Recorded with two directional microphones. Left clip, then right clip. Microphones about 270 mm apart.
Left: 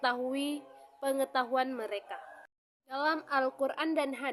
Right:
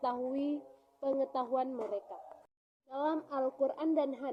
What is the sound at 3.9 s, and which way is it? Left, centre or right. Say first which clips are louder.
Speech: left 1 dB; centre.